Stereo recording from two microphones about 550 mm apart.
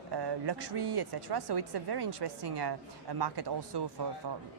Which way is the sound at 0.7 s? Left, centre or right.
Right.